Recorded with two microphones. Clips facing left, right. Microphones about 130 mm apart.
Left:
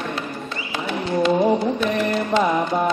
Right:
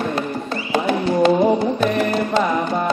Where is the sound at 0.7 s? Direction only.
45° right (ahead or behind).